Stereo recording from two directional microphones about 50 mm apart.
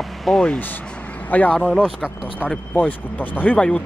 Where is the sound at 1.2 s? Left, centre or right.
Left.